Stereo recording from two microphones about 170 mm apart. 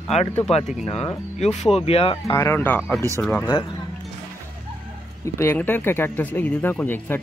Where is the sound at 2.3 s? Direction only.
15° left (ahead or behind).